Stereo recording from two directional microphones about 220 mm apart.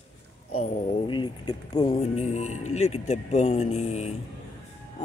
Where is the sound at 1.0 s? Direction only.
20° left (ahead or behind).